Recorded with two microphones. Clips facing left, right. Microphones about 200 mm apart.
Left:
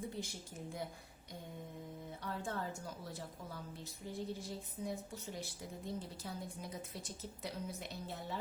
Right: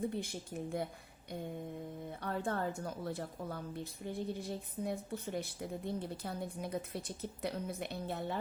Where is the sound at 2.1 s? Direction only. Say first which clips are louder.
Right 6 dB; 60° right (ahead or behind).